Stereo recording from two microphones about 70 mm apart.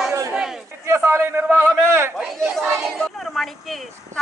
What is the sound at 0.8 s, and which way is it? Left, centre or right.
A man's voice, right.